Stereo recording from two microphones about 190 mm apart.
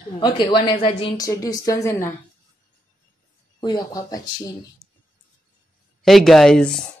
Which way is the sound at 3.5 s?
20° left (ahead or behind).